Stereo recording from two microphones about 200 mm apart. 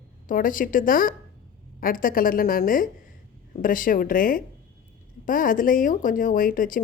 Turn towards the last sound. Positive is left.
turn(degrees=45)  # may be behind; listen again after turning